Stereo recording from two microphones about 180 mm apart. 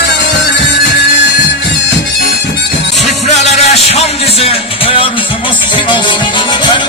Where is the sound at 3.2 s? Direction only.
40° left (ahead or behind).